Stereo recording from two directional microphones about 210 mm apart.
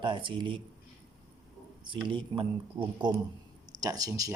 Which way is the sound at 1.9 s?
25° right (ahead or behind).